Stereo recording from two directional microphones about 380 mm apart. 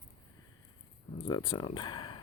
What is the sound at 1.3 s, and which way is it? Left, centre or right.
Speech, centre.